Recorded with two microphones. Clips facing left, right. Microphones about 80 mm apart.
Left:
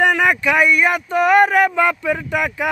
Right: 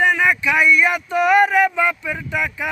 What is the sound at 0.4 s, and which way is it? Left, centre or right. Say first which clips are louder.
Speech: even; left.